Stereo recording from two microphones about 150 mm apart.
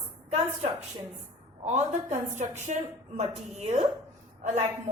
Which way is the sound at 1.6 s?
50° right (ahead or behind).